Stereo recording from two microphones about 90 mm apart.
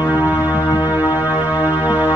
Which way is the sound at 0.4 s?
45° left (ahead or behind).